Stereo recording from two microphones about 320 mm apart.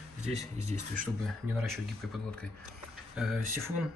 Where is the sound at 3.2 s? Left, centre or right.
Centre.